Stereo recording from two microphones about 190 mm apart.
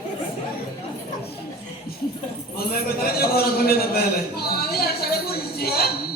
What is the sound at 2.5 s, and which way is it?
A man's voice, 55° left (ahead or behind).